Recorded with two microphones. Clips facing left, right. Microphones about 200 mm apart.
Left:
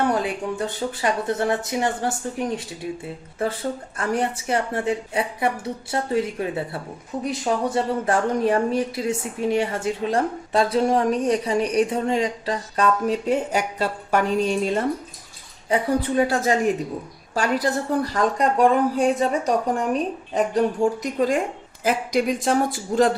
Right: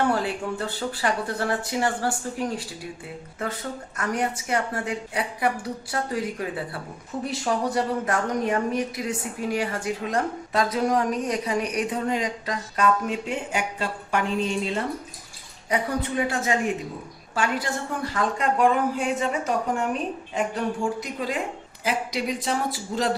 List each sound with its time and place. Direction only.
0.1 s speech: 20° left (ahead or behind); by 14.8 s 45° left (ahead or behind)
15.7 s a woman's voice: 35° left (ahead or behind); by 23.1 s 50° left (ahead or behind)